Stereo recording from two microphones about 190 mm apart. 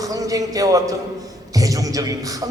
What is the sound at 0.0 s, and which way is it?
A man's voice, 20° right (ahead or behind).